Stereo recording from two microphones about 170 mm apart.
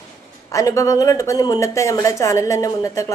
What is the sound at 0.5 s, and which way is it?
A woman's voice, 20° left (ahead or behind).